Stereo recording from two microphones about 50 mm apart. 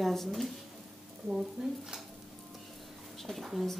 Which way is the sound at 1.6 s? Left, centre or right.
Centre.